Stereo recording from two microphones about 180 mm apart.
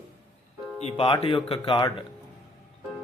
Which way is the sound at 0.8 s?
35° left (ahead or behind).